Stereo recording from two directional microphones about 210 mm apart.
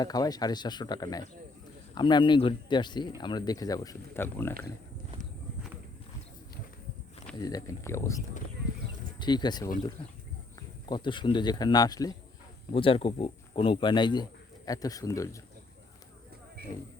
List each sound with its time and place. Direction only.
0.0 s speech: 20° left (ahead or behind)
7.3 s speech: 20° left (ahead or behind)
9.2 s speech: 20° left (ahead or behind)